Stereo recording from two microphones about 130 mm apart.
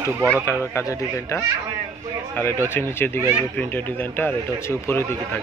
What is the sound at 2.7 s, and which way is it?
A man's voice, 20° left (ahead or behind).